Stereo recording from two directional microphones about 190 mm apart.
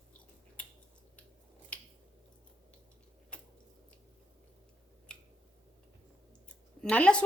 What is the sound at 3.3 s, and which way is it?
Squish, 5° left (ahead or behind).